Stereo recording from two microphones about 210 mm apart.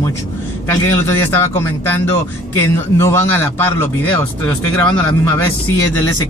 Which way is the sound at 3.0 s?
15° left (ahead or behind).